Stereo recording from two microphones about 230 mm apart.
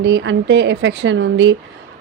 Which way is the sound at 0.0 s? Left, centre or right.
Right.